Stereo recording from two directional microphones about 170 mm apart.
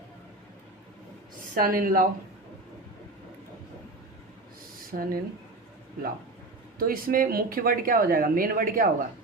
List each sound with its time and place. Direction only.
1.5 s speech: 55° right (ahead or behind)
4.9 s speech: 60° right (ahead or behind)
6.7 s speech: 60° right (ahead or behind)